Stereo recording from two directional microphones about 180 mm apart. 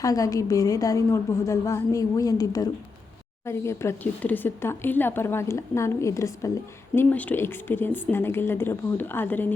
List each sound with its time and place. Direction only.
0.0 s a woman's voice: 20° left (ahead or behind)